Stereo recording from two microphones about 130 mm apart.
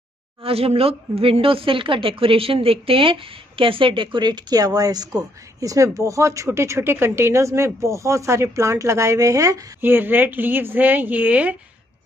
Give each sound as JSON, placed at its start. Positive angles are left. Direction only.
{"t": 0.4, "sound": "speech", "side_deg": -50}